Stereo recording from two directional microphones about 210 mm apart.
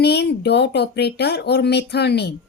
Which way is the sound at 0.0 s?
50° left (ahead or behind).